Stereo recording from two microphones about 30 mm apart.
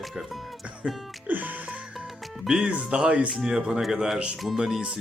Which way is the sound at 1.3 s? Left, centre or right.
Right.